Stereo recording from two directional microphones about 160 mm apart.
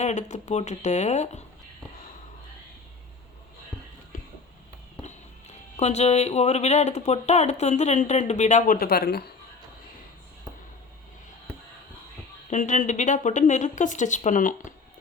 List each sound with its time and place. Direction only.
0.0 s speech: 50° left (ahead or behind)
4.1 s a sound: 60° left (ahead or behind)
5.7 s speech: 45° left (ahead or behind); by 9.3 s 85° left
12.5 s speech: 50° left (ahead or behind)